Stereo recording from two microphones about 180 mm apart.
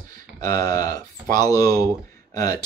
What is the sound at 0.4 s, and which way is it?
Speech, 20° left (ahead or behind).